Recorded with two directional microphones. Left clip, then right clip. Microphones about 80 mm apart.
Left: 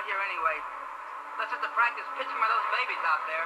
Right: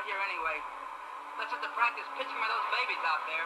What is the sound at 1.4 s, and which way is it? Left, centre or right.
Speech, right.